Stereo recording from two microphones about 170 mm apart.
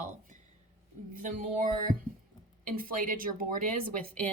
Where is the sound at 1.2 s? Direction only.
50° right (ahead or behind).